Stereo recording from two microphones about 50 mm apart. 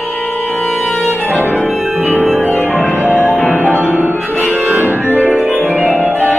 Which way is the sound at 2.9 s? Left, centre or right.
Right.